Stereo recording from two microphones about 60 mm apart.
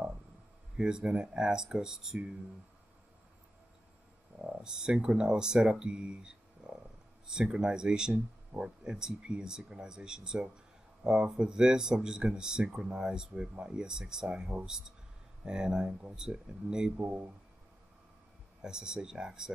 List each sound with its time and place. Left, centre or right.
0.7 s speech: centre
4.4 s a sound: right
4.6 s speech: centre
16.9 s speech: right
18.6 s speech: centre